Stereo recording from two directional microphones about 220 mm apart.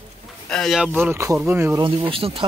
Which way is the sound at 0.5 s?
Centre (ahead or behind).